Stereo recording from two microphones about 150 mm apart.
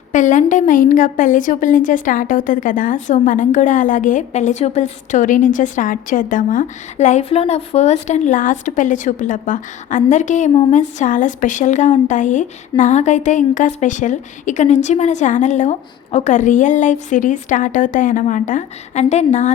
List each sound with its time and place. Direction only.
0.1 s a woman's voice: 55° left (ahead or behind)